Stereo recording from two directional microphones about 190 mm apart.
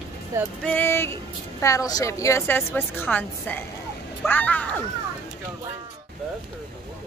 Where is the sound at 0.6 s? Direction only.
10° left (ahead or behind).